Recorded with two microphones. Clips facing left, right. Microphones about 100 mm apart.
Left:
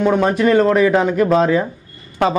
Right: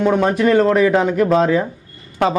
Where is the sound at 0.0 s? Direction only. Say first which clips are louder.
Even; 15° left (ahead or behind).